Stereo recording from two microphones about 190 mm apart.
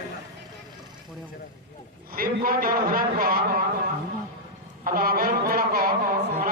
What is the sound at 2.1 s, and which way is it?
A man's voice, 50° right (ahead or behind).